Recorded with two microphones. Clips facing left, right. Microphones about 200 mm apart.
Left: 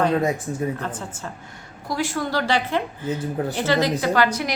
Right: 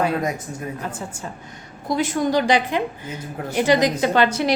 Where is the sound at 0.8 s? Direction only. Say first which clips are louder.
Even; 10° right (ahead or behind).